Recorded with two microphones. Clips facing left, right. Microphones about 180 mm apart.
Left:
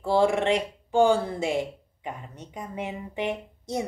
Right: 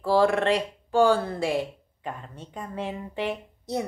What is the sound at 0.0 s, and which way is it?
Speech, 20° left (ahead or behind).